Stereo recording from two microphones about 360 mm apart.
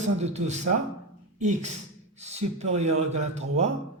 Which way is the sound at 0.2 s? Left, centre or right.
Centre.